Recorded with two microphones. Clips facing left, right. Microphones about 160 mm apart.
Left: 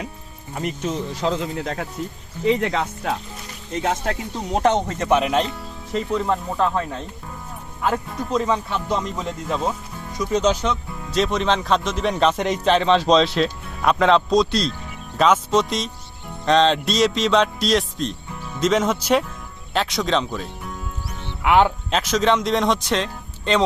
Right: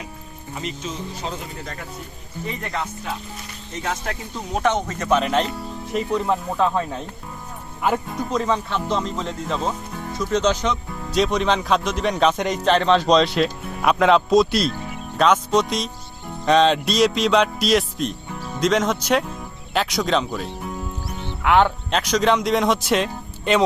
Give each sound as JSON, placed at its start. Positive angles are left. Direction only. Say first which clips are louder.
{"t": 0.5, "sound": "speech", "louder": "left 5 dB", "side_deg": 60}
{"t": 4.5, "sound": "speech", "louder": "left 2 dB", "side_deg": 30}
{"t": 5.0, "sound": "speech", "louder": "left 1 dB", "side_deg": 15}
{"t": 5.9, "sound": "speech", "louder": "even", "side_deg": -5}